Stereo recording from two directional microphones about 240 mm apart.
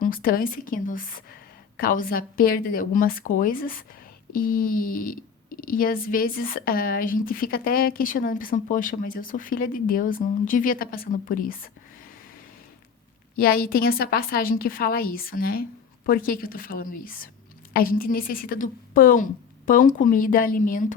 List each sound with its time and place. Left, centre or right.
0.0 s speech: left
13.4 s speech: left